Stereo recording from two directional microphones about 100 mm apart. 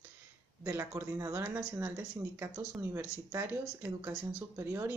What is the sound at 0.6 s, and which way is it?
Speech, 30° right (ahead or behind).